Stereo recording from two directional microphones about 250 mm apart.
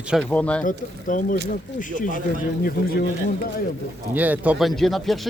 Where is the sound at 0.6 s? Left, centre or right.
Left.